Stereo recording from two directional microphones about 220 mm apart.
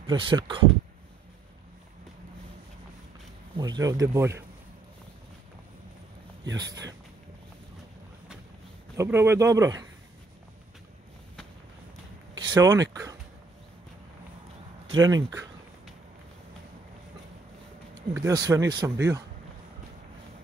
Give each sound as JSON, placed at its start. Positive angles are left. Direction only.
{"t": 0.0, "sound": "speech", "side_deg": -20}
{"t": 3.5, "sound": "speech", "side_deg": -20}
{"t": 6.5, "sound": "speech", "side_deg": -15}
{"t": 8.9, "sound": "speech", "side_deg": -10}
{"t": 12.4, "sound": "speech", "side_deg": -15}
{"t": 14.9, "sound": "speech", "side_deg": -15}
{"t": 18.1, "sound": "speech", "side_deg": -15}